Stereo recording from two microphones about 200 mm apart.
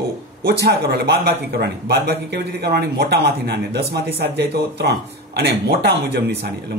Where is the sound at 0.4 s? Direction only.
50° right (ahead or behind).